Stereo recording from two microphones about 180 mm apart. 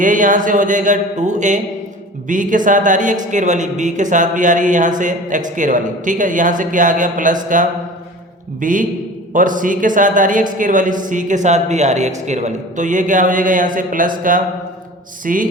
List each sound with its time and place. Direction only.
0.0 s speech: 45° right (ahead or behind)